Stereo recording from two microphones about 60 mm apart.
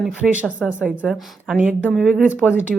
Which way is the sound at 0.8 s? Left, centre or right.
Centre.